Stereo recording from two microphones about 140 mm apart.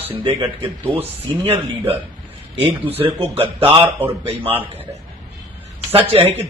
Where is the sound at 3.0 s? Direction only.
40° right (ahead or behind).